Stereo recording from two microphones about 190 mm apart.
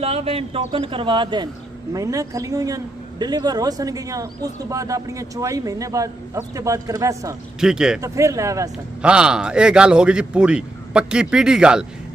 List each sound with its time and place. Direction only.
0.0 s speech: 30° right (ahead or behind)
7.6 s speech: 5° right (ahead or behind)
8.0 s speech: 15° right (ahead or behind)
9.0 s speech: 5° right (ahead or behind)